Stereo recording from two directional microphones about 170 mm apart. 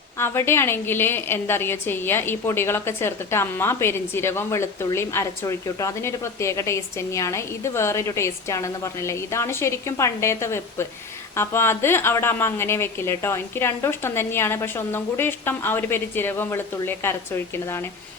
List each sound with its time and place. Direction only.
0.2 s a woman's voice: 15° left (ahead or behind)